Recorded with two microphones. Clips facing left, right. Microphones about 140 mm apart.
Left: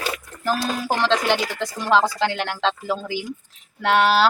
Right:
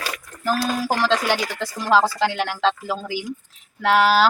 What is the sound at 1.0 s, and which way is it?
A woman's voice, 5° right (ahead or behind).